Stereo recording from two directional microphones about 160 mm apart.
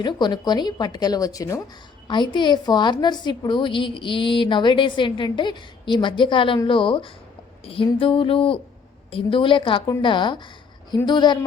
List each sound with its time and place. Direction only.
0.0 s a woman's voice: 25° left (ahead or behind)